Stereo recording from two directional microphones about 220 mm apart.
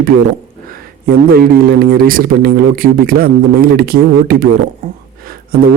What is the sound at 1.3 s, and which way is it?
A man's voice, 40° right (ahead or behind).